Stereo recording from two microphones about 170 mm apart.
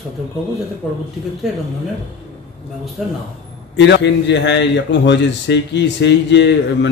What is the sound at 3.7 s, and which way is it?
A man's voice, 90° left.